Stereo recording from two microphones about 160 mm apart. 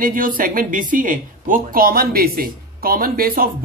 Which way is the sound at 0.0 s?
60° right (ahead or behind).